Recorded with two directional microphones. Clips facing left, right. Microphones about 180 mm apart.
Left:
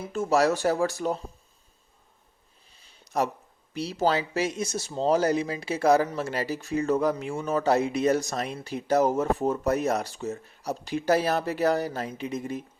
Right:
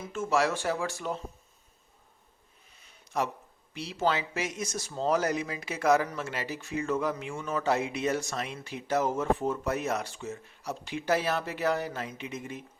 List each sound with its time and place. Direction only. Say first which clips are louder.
0.0 s speech: left 5 dB; 35° left (ahead or behind)
2.6 s a sound: left 2 dB; 30° left (ahead or behind)
3.8 s speech: left 4 dB; 40° left (ahead or behind)